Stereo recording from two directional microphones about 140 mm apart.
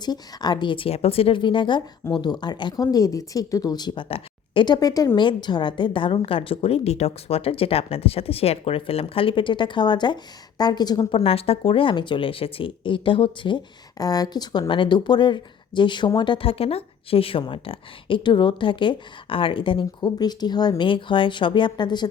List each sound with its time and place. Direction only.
0.0 s a woman's voice: 30° left (ahead or behind)
11.2 s speech: 45° left (ahead or behind)